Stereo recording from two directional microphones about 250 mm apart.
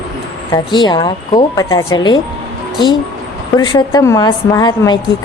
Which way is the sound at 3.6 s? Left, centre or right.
Centre.